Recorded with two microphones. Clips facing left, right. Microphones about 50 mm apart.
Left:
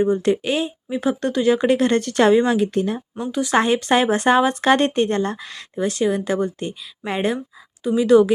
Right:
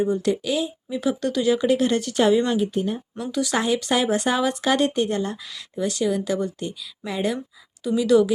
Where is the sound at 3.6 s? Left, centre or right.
Left.